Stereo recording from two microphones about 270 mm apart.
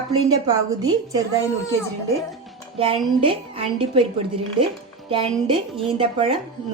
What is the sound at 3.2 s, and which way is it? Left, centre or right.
Speech, centre.